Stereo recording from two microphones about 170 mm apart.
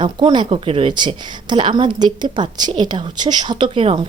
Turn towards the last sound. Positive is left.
turn(degrees=-35)  # may be behind; listen again after turning